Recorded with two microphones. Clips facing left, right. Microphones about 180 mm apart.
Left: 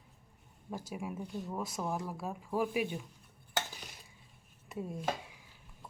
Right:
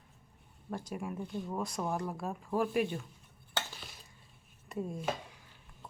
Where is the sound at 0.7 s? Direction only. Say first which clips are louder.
Right 1 dB; 10° left (ahead or behind).